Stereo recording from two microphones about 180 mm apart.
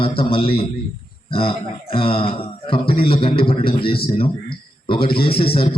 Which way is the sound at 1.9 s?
30° left (ahead or behind).